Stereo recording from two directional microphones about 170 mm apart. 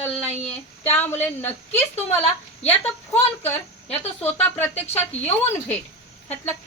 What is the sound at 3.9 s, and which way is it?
Speech, 35° left (ahead or behind).